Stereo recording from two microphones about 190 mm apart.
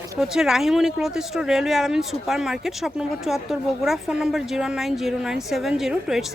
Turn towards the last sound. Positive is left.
turn(degrees=0)  # may be behind; listen again after turning